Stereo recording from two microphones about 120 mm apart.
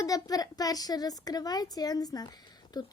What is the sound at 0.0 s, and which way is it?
A child's voice, 30° left (ahead or behind).